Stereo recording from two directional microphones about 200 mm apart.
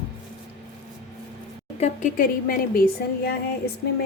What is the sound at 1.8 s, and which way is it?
A woman's voice, 35° left (ahead or behind).